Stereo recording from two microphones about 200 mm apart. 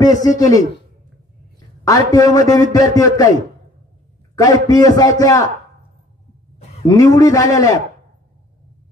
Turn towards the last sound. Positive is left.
turn(degrees=15)  # may be behind; listen again after turning